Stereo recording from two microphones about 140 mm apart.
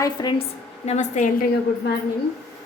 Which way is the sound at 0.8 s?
60° left (ahead or behind).